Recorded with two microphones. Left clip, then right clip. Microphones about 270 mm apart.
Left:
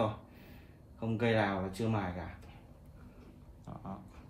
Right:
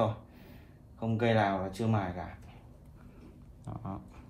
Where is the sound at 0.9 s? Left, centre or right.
Centre.